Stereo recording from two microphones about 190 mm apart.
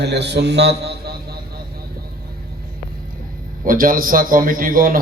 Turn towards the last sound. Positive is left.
turn(degrees=-45)  # may be behind; listen again after turning